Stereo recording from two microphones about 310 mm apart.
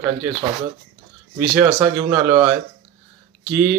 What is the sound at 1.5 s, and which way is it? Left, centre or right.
Speech, centre.